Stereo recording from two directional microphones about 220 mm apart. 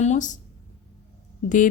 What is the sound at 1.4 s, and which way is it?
Speech, 35° left (ahead or behind).